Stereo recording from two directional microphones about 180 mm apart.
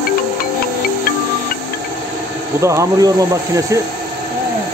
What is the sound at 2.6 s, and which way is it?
Speech, 15° right (ahead or behind).